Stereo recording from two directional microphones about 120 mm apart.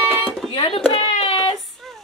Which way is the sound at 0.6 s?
50° left (ahead or behind).